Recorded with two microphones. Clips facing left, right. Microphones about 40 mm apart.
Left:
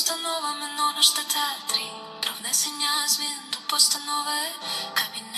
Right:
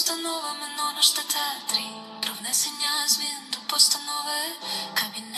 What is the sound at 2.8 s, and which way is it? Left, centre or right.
Music, left.